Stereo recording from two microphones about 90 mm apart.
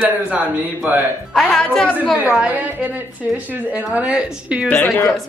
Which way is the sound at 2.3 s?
15° right (ahead or behind).